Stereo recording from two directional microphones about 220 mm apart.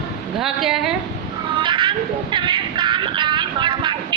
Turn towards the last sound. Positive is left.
turn(degrees=-20)  # may be behind; listen again after turning